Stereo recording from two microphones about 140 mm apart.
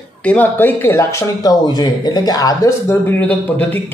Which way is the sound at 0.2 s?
10° left (ahead or behind).